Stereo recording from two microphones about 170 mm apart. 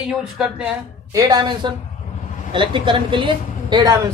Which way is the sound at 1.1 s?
20° right (ahead or behind).